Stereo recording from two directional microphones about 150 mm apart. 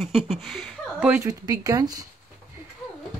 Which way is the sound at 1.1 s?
20° right (ahead or behind).